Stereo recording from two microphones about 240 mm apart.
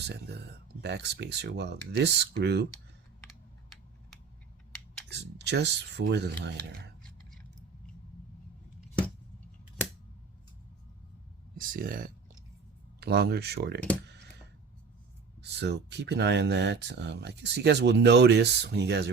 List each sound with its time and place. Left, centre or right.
0.1 s speech: right
5.0 s speech: right
11.5 s speech: right
15.4 s speech: right